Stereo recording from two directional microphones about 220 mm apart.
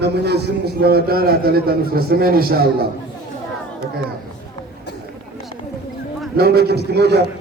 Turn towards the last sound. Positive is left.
turn(degrees=-45)  # may be behind; listen again after turning